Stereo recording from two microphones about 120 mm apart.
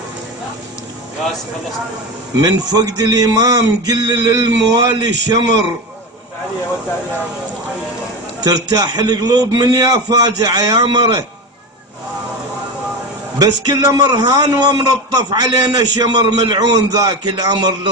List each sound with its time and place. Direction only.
2.4 s a man's voice: 35° right (ahead or behind)
8.4 s a man's voice: 30° right (ahead or behind)
13.4 s a man's voice: 30° right (ahead or behind)